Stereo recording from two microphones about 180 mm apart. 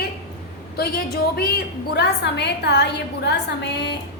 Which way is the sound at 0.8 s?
60° left (ahead or behind).